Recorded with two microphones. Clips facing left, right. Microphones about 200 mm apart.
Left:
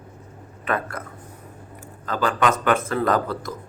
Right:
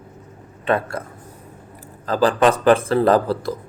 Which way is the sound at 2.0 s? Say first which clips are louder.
Right 6 dB; 35° right (ahead or behind).